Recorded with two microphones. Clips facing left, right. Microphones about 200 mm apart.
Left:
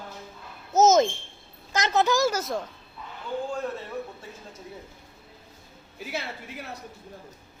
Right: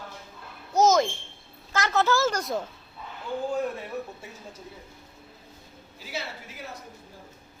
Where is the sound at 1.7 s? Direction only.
20° left (ahead or behind); by 2.6 s centre (ahead or behind).